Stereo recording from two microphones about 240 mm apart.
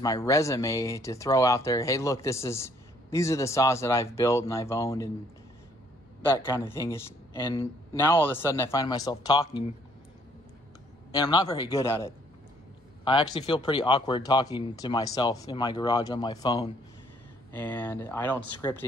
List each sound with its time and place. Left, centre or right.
0.0 s speech: centre
6.2 s speech: centre
11.1 s speech: centre